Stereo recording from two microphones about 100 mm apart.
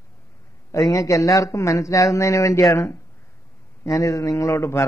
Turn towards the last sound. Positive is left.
turn(degrees=30)  # may be behind; listen again after turning